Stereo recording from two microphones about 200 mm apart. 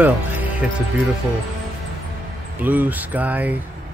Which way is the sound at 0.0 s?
10° right (ahead or behind).